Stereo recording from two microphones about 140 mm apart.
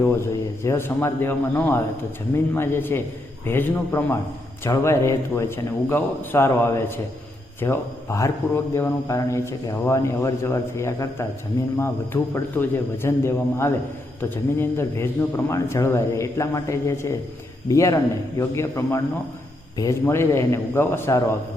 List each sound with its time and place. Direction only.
0.6 s a man's voice: 15° left (ahead or behind)